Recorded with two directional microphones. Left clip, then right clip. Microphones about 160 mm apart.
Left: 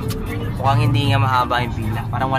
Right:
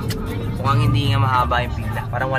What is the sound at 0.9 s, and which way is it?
Speech, 55° left (ahead or behind).